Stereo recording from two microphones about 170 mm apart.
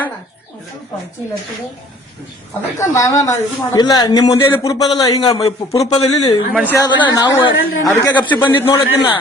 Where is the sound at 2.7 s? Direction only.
20° left (ahead or behind).